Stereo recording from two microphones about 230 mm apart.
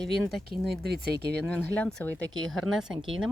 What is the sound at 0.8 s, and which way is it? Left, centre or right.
Speech, right.